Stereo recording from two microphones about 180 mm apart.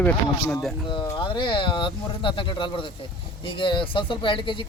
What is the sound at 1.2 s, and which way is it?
Speech, 30° left (ahead or behind).